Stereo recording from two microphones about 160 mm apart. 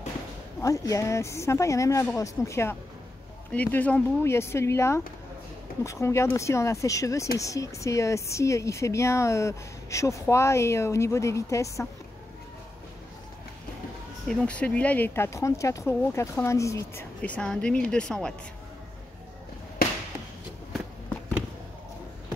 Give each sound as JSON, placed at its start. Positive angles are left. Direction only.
{"t": 0.6, "sound": "a woman's voice", "side_deg": 20}
{"t": 14.2, "sound": "speech", "side_deg": 5}
{"t": 17.2, "sound": "a woman's voice", "side_deg": 5}